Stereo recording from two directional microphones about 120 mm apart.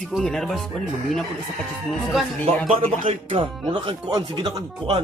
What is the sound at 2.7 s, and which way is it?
Speech, 50° right (ahead or behind).